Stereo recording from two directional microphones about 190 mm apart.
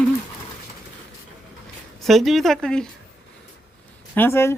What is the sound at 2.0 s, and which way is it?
Speech, centre (ahead or behind).